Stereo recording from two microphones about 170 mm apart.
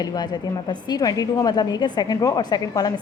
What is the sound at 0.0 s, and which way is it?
A woman's voice, 25° left (ahead or behind).